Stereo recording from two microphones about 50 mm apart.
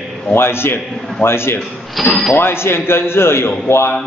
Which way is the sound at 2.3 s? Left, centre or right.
Left.